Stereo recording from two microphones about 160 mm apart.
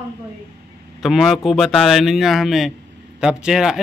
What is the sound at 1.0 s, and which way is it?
A man's voice, centre (ahead or behind).